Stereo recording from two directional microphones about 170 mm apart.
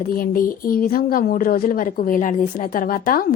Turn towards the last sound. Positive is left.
turn(degrees=55)  # may be behind; listen again after turning